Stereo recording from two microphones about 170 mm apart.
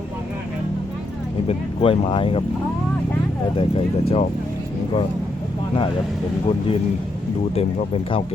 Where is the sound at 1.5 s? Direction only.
35° left (ahead or behind).